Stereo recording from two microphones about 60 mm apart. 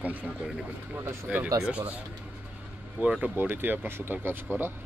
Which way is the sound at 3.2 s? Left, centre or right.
Right.